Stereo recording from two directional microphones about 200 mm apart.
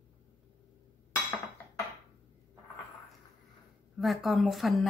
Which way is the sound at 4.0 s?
Centre (ahead or behind).